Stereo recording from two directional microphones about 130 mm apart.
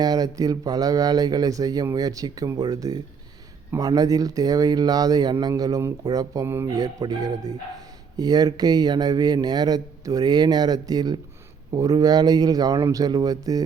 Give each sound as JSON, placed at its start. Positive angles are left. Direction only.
{"t": 0.0, "sound": "speech", "side_deg": -30}